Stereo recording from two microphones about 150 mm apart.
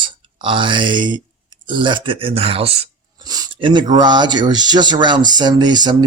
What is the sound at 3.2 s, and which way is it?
Speech, 25° right (ahead or behind).